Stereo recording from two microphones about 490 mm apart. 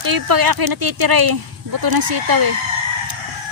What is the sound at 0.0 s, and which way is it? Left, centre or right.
Speech, right.